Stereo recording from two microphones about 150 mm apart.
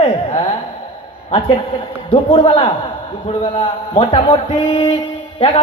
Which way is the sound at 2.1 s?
35° left (ahead or behind).